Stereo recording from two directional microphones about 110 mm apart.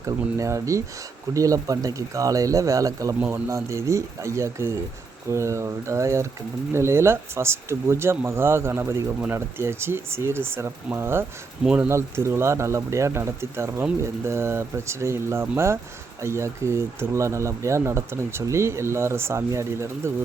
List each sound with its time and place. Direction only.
0.0 s speech: 30° right (ahead or behind)
11.6 s speech: 10° right (ahead or behind)
11.9 s speech: 25° right (ahead or behind)